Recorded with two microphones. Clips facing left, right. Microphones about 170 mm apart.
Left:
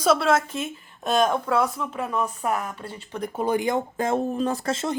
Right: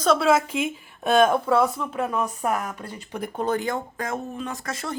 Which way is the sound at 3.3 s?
10° left (ahead or behind).